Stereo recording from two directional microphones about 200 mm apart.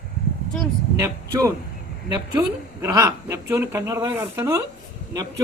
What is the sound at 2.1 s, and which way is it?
A woman's voice, 20° right (ahead or behind).